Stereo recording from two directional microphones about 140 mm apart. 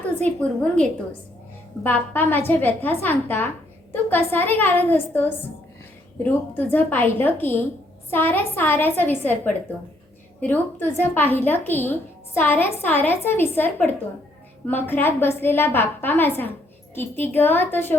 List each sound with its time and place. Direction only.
0.2 s a woman's voice: 10° left (ahead or behind)
6.5 s a woman's voice: 15° left (ahead or behind)